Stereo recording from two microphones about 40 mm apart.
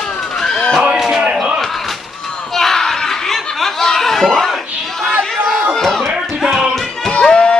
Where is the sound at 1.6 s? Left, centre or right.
Centre.